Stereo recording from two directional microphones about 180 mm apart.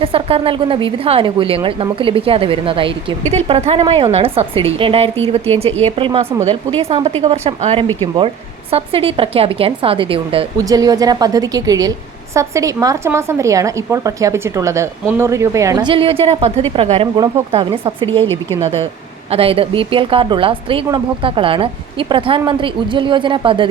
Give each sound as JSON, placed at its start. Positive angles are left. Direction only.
{"t": 0.0, "sound": "a woman's voice", "side_deg": -30}
{"t": 18.2, "sound": "a woman's voice", "side_deg": 15}
{"t": 19.3, "sound": "speech", "side_deg": -30}